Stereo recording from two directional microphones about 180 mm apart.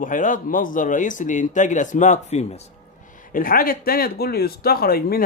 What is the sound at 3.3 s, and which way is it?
Speech, 50° left (ahead or behind).